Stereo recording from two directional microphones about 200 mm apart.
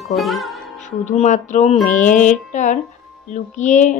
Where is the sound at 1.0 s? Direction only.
35° left (ahead or behind).